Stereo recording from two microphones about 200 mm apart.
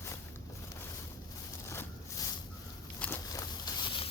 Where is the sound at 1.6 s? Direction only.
15° left (ahead or behind).